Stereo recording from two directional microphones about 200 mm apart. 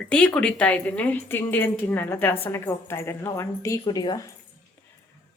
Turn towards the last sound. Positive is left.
turn(degrees=20)  # may be behind; listen again after turning